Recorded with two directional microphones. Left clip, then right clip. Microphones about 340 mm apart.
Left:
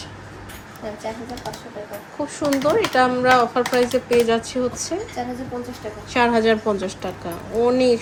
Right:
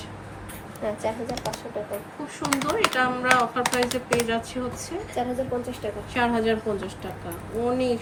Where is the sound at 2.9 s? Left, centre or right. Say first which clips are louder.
Left 6 dB; centre.